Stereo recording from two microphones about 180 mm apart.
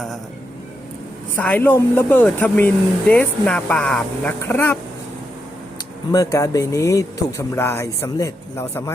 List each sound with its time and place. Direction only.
1.4 s speech: 10° left (ahead or behind)
6.1 s speech: 20° left (ahead or behind)